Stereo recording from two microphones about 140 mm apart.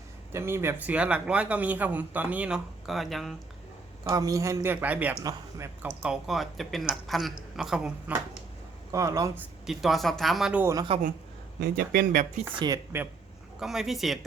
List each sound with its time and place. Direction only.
0.3 s speech: 15° right (ahead or behind); by 3.3 s centre (ahead or behind)
4.1 s speech: 25° right (ahead or behind); by 8.1 s 5° right (ahead or behind)
8.9 s speech: 25° right (ahead or behind)
9.6 s speech: centre (ahead or behind)
10.6 s speech: 20° right (ahead or behind)
11.8 s speech: 90° right
12.5 s speech: 30° right (ahead or behind)
13.6 s speech: 5° right (ahead or behind)